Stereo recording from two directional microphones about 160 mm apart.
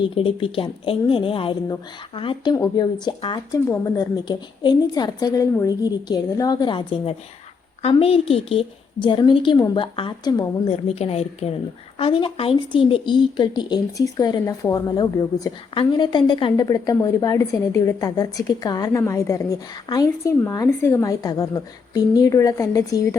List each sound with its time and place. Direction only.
0.0 s a woman's voice: 35° left (ahead or behind)
10.7 s a woman's voice: 40° left (ahead or behind); by 23.0 s 20° left (ahead or behind)